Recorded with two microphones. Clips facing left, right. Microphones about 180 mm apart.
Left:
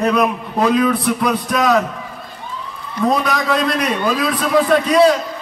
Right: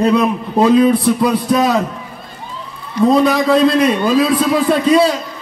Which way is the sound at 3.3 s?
25° right (ahead or behind).